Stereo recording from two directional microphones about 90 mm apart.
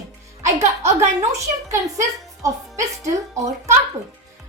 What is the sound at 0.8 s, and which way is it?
A woman's voice, 35° right (ahead or behind).